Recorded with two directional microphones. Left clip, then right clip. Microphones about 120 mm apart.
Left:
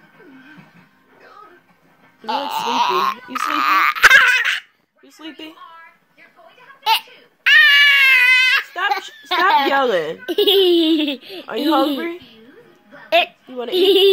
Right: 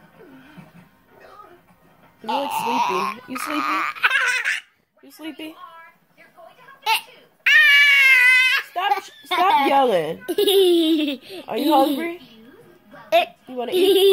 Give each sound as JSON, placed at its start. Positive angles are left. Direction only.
{"t": 2.2, "sound": "speech", "side_deg": -5}
{"t": 4.3, "sound": "a sound", "side_deg": -10}
{"t": 6.8, "sound": "babbling", "side_deg": -10}
{"t": 8.8, "sound": "a woman's voice", "side_deg": -20}